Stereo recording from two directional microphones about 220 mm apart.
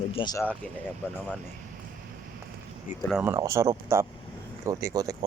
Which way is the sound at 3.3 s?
15° right (ahead or behind).